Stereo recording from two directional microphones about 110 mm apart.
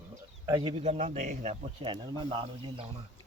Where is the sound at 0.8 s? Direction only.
85° right.